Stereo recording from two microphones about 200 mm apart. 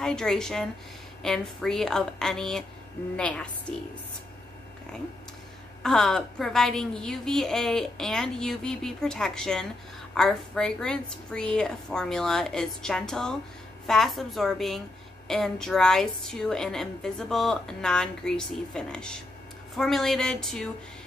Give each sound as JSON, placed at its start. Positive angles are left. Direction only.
{"t": 0.0, "sound": "a woman's voice", "side_deg": 5}
{"t": 5.8, "sound": "a woman's voice", "side_deg": 0}